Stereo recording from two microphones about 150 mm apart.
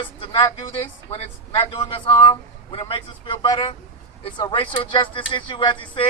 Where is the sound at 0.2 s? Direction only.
35° left (ahead or behind).